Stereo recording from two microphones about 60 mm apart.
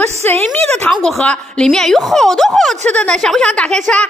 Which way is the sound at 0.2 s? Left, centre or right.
Left.